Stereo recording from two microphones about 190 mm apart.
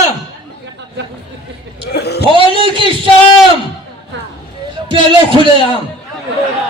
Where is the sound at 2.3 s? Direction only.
25° right (ahead or behind).